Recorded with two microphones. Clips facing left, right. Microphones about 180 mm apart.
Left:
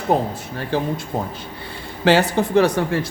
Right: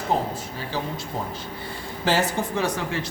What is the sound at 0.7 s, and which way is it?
Speech, 55° left (ahead or behind).